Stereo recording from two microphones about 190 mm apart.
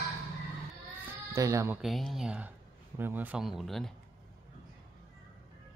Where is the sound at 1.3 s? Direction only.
15° right (ahead or behind).